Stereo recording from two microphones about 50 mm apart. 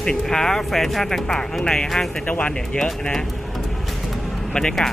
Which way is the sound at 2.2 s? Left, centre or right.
Left.